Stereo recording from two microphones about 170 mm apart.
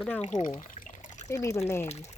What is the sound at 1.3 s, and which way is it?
Speech, 20° left (ahead or behind).